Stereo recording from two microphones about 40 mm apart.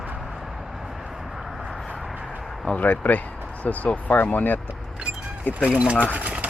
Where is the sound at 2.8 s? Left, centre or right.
Left.